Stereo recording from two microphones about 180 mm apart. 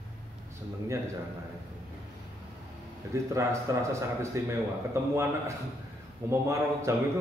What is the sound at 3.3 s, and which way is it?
A man's voice, 15° right (ahead or behind).